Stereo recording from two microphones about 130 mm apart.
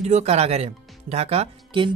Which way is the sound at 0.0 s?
60° right (ahead or behind).